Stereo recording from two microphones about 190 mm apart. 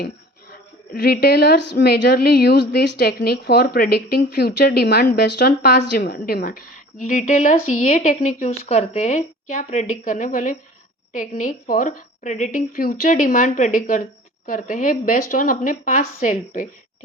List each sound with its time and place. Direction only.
1.0 s a woman's voice: 60° left (ahead or behind); by 16.6 s 40° left (ahead or behind)